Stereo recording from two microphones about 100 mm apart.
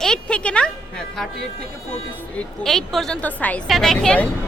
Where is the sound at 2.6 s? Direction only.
5° left (ahead or behind).